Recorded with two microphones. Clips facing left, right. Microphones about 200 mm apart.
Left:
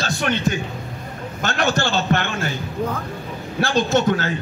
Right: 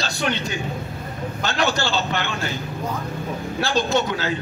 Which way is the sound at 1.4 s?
50° left (ahead or behind).